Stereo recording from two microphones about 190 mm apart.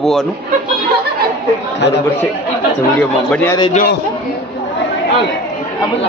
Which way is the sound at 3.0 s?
5° left (ahead or behind).